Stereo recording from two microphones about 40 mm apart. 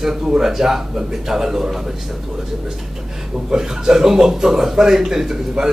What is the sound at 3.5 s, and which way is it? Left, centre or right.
Speech, centre.